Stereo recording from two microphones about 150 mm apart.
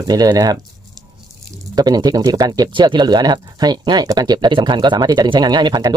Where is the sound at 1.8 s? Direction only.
25° right (ahead or behind).